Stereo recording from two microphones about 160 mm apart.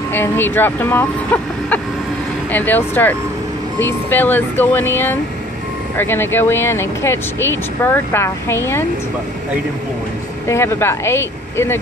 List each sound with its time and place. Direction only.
0.1 s speech: 15° left (ahead or behind)
10.5 s speech: 15° left (ahead or behind)